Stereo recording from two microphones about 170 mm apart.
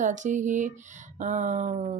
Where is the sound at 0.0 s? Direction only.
45° right (ahead or behind).